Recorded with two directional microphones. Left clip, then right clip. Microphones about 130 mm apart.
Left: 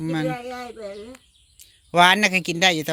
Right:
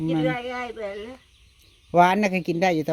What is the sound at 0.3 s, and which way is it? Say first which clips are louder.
Speech: right 2 dB; 10° left (ahead or behind).